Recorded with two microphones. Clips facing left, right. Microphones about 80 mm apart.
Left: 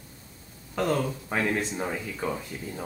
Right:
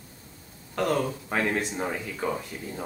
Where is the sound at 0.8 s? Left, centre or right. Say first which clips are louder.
Right 1 dB; centre.